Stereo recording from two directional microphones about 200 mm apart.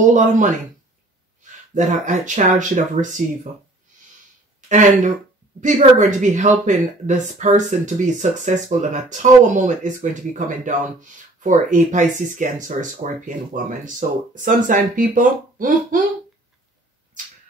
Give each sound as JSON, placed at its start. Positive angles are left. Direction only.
{"t": 0.1, "sound": "speech", "side_deg": -40}
{"t": 4.6, "sound": "speech", "side_deg": -40}
{"t": 17.2, "sound": "a sound", "side_deg": -40}